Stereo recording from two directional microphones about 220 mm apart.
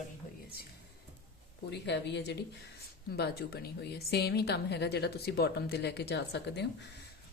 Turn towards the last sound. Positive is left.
turn(degrees=50)  # may be behind; listen again after turning